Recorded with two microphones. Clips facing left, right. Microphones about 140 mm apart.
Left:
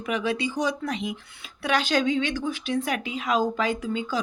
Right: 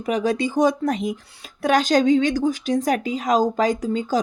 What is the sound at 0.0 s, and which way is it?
A woman's voice, 40° right (ahead or behind).